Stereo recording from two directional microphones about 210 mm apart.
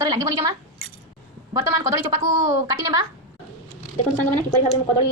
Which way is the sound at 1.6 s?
15° right (ahead or behind).